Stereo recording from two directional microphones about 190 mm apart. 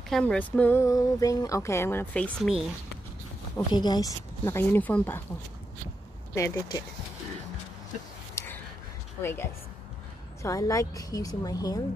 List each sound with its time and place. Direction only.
0.1 s speech: 5° left (ahead or behind)
3.5 s speech: 20° left (ahead or behind)
6.3 s speech: 15° left (ahead or behind)
8.4 s a sound: 15° left (ahead or behind)
9.2 s speech: 10° left (ahead or behind)